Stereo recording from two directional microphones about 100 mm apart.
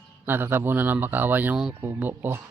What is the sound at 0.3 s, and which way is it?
Speech, 20° right (ahead or behind).